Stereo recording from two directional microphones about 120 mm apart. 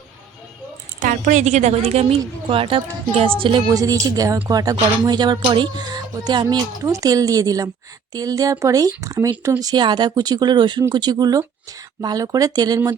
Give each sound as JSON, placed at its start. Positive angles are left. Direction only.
{"t": 0.9, "sound": "speech", "side_deg": -90}
{"t": 3.7, "sound": "speech", "side_deg": -30}